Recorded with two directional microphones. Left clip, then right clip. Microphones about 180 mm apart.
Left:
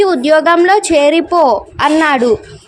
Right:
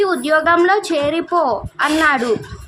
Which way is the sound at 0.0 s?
20° left (ahead or behind).